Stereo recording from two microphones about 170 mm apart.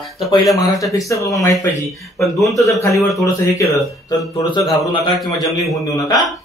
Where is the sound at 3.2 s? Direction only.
20° left (ahead or behind).